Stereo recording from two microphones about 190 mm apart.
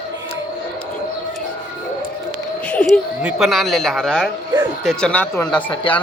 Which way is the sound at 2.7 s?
5° left (ahead or behind).